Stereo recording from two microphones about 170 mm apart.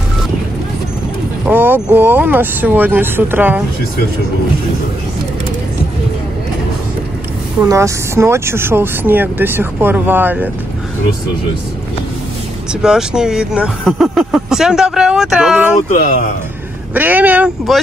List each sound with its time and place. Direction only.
1.5 s speech: 10° right (ahead or behind)
7.6 s speech: 20° right (ahead or behind)
12.8 s speech: 5° right (ahead or behind)
15.9 s speech: 50° left (ahead or behind)
16.9 s speech: 10° right (ahead or behind)